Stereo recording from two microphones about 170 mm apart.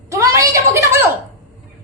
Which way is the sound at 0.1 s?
20° right (ahead or behind).